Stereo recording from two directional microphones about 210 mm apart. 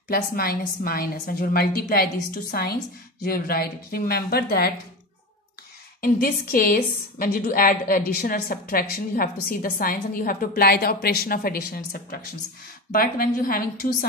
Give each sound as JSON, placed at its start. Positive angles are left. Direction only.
{"t": 0.1, "sound": "a woman's voice", "side_deg": 45}
{"t": 5.9, "sound": "a woman's voice", "side_deg": 45}